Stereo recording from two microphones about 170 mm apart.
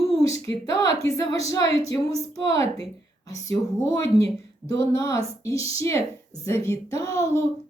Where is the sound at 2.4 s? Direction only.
15° left (ahead or behind).